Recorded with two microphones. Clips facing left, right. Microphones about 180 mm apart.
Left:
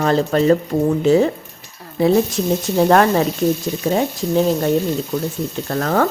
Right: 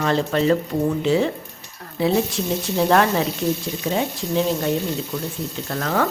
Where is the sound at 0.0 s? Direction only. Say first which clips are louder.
Left 4 dB; 40° left (ahead or behind).